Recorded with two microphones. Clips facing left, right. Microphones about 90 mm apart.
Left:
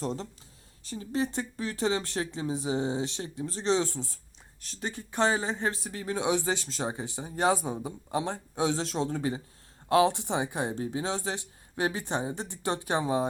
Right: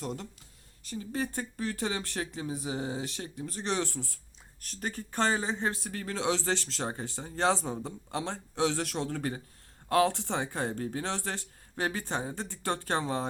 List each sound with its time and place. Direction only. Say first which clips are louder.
0.0 s speech: left 4 dB; 35° left (ahead or behind); by 13.2 s 15° left (ahead or behind)